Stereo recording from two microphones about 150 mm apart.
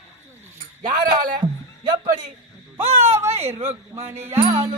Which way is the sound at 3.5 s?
15° right (ahead or behind).